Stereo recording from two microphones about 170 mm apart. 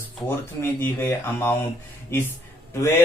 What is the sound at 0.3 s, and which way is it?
Speech, 15° left (ahead or behind).